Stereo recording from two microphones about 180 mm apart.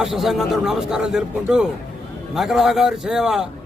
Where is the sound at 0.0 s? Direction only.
Centre (ahead or behind).